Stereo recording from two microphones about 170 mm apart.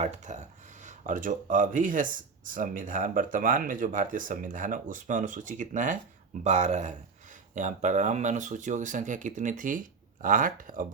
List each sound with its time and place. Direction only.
0.0 s speech: 45° right (ahead or behind)